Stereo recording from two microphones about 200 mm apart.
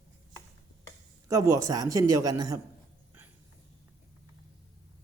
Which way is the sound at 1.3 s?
15° right (ahead or behind).